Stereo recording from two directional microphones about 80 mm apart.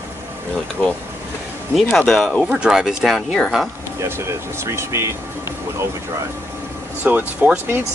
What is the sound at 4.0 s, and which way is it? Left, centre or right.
Speech, right.